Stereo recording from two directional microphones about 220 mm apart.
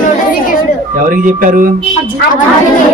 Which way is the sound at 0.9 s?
35° right (ahead or behind).